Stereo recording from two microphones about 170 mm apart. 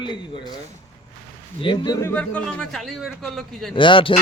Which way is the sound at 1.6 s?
30° left (ahead or behind).